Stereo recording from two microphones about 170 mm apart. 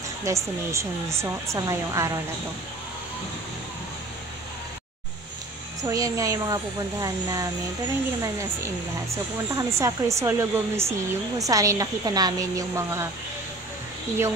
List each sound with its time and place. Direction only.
0.2 s speech: 15° right (ahead or behind)
5.8 s speech: 20° right (ahead or behind)